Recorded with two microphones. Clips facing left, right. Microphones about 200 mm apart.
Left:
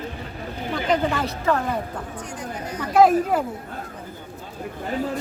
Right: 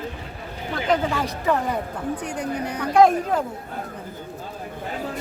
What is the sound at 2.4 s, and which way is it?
Speech, 65° right (ahead or behind).